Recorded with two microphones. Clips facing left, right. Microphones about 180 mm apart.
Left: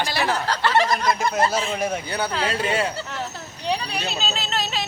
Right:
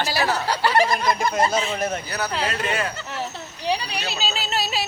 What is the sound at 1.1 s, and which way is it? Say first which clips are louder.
Speech: even; 5° left (ahead or behind).